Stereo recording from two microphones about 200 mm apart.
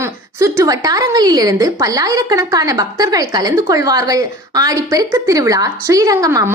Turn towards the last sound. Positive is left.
turn(degrees=-15)  # may be behind; listen again after turning